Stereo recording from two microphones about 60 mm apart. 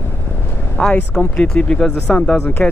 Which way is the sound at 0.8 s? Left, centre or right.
Centre.